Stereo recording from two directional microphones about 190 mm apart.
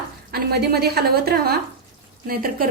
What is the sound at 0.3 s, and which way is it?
A woman's voice, 55° right (ahead or behind).